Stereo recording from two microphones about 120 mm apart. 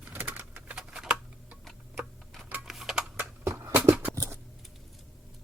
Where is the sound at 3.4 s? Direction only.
20° right (ahead or behind).